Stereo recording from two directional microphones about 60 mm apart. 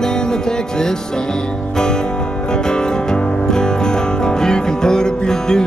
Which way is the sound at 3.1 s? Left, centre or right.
Centre.